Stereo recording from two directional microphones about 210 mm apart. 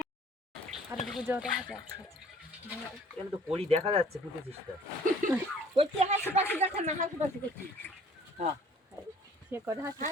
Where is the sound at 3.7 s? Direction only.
30° right (ahead or behind).